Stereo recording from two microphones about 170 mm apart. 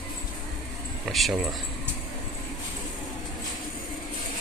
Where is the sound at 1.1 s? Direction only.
Centre (ahead or behind).